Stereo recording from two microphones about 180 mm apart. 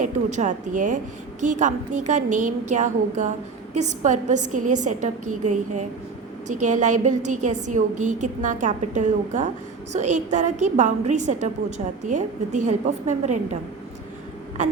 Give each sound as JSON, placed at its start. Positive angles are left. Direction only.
{"t": 0.0, "sound": "a woman's voice", "side_deg": -40}
{"t": 14.6, "sound": "a woman's voice", "side_deg": -40}